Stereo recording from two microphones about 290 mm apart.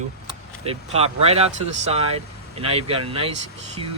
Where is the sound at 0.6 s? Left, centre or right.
Right.